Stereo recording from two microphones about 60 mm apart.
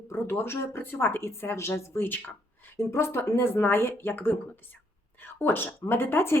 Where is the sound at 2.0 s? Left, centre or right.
Left.